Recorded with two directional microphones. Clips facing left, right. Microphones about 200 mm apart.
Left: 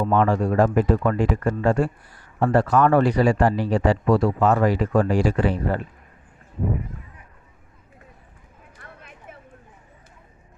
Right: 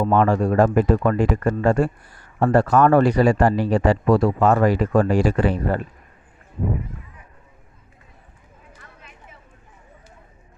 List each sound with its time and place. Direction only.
0.0 s speech: 45° right (ahead or behind)